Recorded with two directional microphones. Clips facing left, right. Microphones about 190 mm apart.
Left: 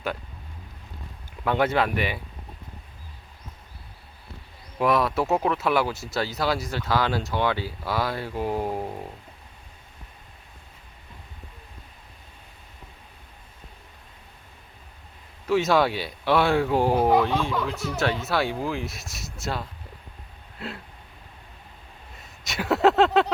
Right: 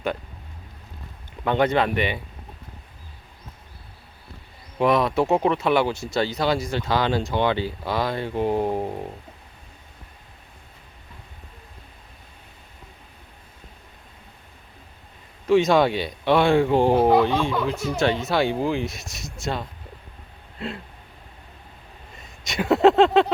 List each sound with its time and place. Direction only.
1.5 s speech: 5° left (ahead or behind)
4.8 s speech: 5° left (ahead or behind)
8.3 s speech: 25° right (ahead or behind)
15.4 s speech: 5° left (ahead or behind)
22.4 s speech: centre (ahead or behind)